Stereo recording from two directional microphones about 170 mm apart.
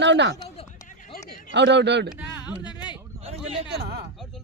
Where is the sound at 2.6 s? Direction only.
25° left (ahead or behind).